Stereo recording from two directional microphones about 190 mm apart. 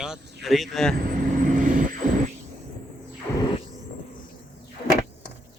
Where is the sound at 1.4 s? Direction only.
45° right (ahead or behind).